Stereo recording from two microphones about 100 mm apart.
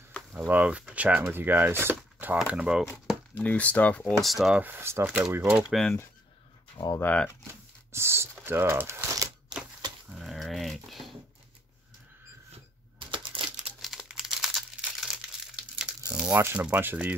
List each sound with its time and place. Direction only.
0.5 s speech: 15° right (ahead or behind)
3.3 s speech: 15° left (ahead or behind)
4.2 s speech: centre (ahead or behind)
4.6 s speech: 20° right (ahead or behind)
5.4 s speech: 10° right (ahead or behind)
7.0 s speech: 20° left (ahead or behind)
7.9 s speech: 25° right (ahead or behind)
9.5 s typewriter: 45° right (ahead or behind)
10.1 s typing: centre (ahead or behind)
13.1 s crumpling: 60° right (ahead or behind)
13.7 s crumpling: 5° right (ahead or behind)
16.6 s speech: 15° right (ahead or behind)